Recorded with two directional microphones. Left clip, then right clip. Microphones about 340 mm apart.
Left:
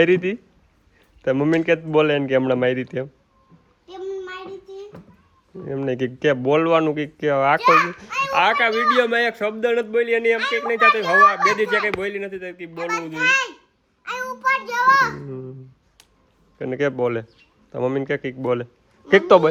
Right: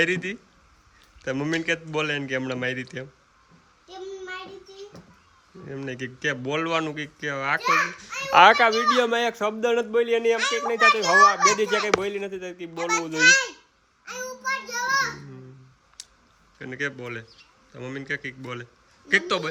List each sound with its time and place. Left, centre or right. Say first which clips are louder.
0.0 s speech: left 7 dB; centre
5.6 s speech: left 10 dB; centre
8.3 s a child's voice: right 4 dB; right
8.6 s speech: left 2 dB; centre
14.0 s child singing: left 8 dB; centre
16.0 s clicking: right 9 dB; centre
16.6 s a man's voice: left 9 dB; centre